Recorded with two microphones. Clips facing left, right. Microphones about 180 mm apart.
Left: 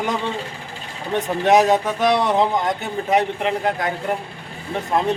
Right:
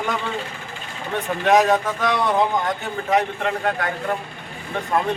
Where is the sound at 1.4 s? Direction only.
20° left (ahead or behind).